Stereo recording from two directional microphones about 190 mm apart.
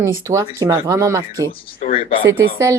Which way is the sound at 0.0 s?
15° right (ahead or behind).